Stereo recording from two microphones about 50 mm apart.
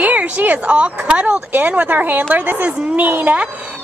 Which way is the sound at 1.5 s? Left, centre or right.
Right.